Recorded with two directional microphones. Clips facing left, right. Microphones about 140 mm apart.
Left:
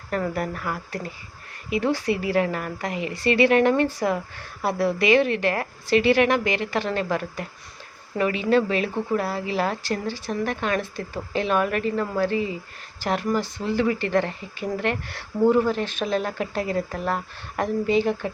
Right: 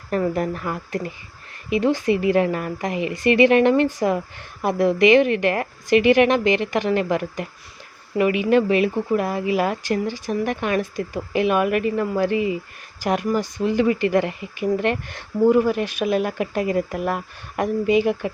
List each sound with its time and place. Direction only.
0.1 s a woman's voice: 20° right (ahead or behind)